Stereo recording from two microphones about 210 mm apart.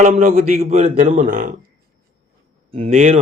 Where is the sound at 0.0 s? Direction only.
35° right (ahead or behind).